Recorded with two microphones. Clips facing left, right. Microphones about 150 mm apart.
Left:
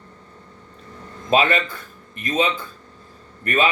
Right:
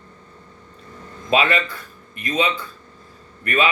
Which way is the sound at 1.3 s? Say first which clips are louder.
Left 1 dB; 45° left (ahead or behind).